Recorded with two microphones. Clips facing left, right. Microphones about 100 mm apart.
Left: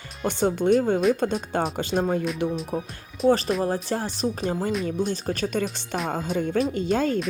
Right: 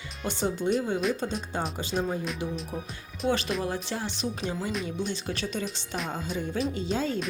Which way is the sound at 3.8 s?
45° left (ahead or behind).